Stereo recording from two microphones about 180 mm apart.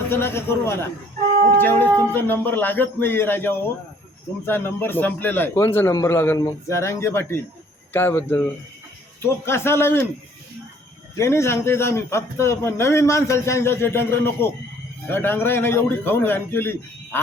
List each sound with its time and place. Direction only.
0.1 s a man's voice: 15° left (ahead or behind)
11.2 s a man's voice: 15° left (ahead or behind)